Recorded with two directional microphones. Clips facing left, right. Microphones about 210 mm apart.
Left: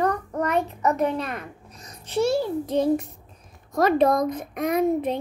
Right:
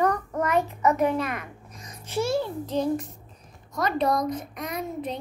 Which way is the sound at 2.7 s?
60° left (ahead or behind).